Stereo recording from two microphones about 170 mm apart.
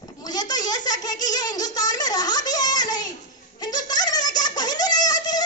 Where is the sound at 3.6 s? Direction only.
25° left (ahead or behind).